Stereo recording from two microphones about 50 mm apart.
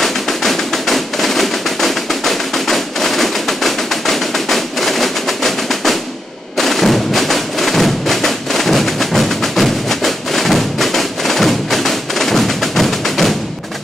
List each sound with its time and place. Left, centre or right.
0.0 s music: centre